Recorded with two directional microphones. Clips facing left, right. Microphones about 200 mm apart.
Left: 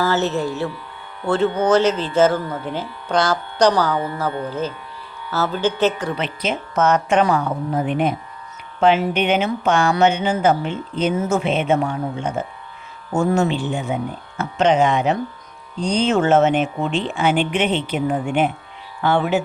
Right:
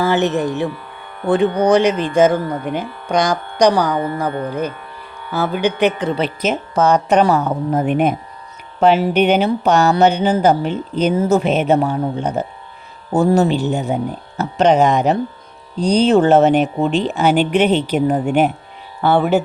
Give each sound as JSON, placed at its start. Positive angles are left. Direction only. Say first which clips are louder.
{"t": 0.0, "sound": "speech", "louder": "right 3 dB", "side_deg": -15}
{"t": 0.7, "sound": "music", "louder": "right 3 dB", "side_deg": -55}
{"t": 1.3, "sound": "speech", "louder": "right 3 dB", "side_deg": -15}
{"t": 3.9, "sound": "music", "louder": "right 3 dB", "side_deg": -45}
{"t": 5.3, "sound": "speech", "louder": "right 2 dB", "side_deg": -15}
{"t": 6.1, "sound": "speech", "louder": "right 5 dB", "side_deg": -40}
{"t": 8.8, "sound": "speech", "louder": "right 4 dB", "side_deg": -40}